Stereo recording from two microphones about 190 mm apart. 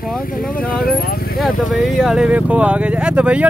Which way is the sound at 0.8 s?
55° left (ahead or behind).